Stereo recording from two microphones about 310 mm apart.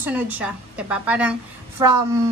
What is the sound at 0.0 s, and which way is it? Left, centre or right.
A woman's voice, centre.